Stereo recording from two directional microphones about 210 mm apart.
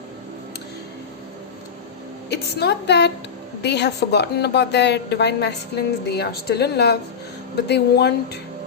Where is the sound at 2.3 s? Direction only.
55° left (ahead or behind).